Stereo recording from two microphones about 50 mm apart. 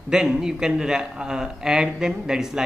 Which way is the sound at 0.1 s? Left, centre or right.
Centre.